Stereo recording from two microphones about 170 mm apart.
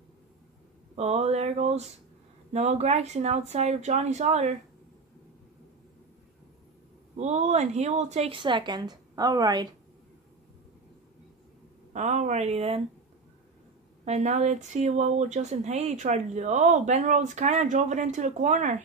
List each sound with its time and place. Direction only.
0.9 s speech: 40° right (ahead or behind)
7.2 s a woman's voice: 40° right (ahead or behind); by 9.7 s 25° right (ahead or behind)
11.9 s speech: 45° right (ahead or behind)
14.0 s speech: 40° right (ahead or behind)